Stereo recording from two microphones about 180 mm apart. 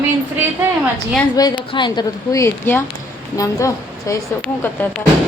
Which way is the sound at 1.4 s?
20° left (ahead or behind).